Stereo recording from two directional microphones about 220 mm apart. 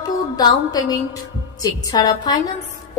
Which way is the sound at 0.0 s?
15° left (ahead or behind).